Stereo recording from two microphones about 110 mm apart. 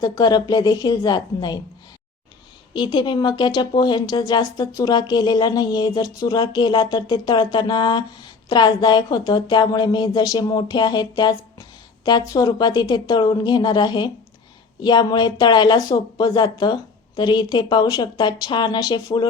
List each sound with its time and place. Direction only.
0.0 s a woman's voice: 40° left (ahead or behind)
2.7 s a woman's voice: 45° left (ahead or behind)